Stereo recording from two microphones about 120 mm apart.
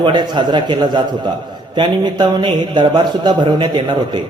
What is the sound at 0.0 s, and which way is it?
A man's voice, 40° right (ahead or behind).